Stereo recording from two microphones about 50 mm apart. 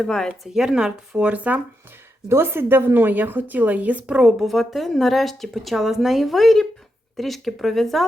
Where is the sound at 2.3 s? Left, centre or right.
Right.